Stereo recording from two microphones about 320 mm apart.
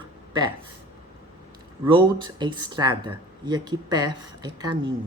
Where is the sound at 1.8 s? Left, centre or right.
Centre.